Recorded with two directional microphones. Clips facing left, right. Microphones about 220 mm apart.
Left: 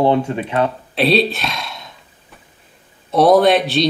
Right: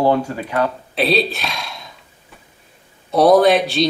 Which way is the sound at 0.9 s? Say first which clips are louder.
Left 3 dB; centre (ahead or behind).